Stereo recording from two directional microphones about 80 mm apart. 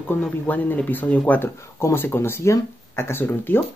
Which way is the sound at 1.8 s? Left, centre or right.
Left.